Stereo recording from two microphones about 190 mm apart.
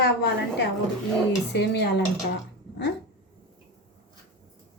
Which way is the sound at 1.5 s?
60° left (ahead or behind).